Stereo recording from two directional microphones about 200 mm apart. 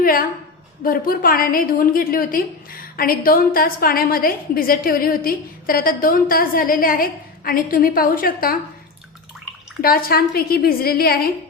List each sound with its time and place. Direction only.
0.0 s a woman's voice: 45° left (ahead or behind)
9.8 s a woman's voice: 45° left (ahead or behind)